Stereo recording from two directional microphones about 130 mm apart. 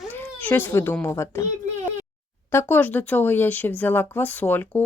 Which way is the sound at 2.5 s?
15° left (ahead or behind).